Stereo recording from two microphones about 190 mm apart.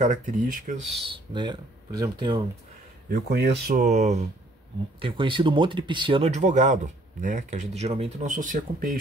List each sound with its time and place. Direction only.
0.0 s speech: 40° right (ahead or behind)
1.3 s speech: 25° right (ahead or behind)
3.1 s speech: 60° right (ahead or behind)
3.8 s speech: 35° right (ahead or behind)
5.0 s speech: 25° right (ahead or behind); by 8.9 s 45° right (ahead or behind)